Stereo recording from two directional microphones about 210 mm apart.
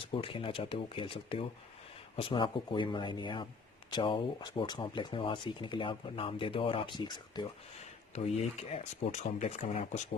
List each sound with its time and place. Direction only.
0.0 s speech: 25° left (ahead or behind)
8.1 s speech: 30° left (ahead or behind)